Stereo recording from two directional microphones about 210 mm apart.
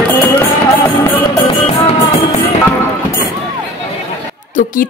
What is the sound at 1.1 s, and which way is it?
Music, 25° left (ahead or behind).